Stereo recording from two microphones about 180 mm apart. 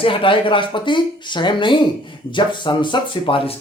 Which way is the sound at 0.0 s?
30° left (ahead or behind).